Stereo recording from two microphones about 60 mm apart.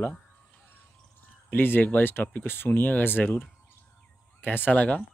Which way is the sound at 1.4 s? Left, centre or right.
Left.